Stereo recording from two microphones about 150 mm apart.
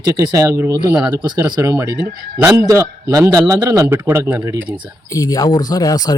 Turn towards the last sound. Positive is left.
turn(degrees=25)  # may be behind; listen again after turning